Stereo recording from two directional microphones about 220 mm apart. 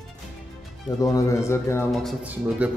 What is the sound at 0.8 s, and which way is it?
Speech, 15° left (ahead or behind).